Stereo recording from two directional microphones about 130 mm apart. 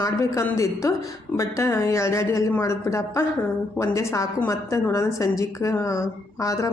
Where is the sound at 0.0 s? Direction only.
20° left (ahead or behind).